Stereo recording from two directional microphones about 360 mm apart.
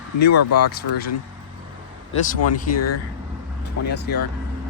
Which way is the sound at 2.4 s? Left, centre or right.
Left.